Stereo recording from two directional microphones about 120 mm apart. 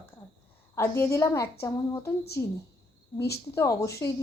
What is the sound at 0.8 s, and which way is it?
Speech, 25° left (ahead or behind).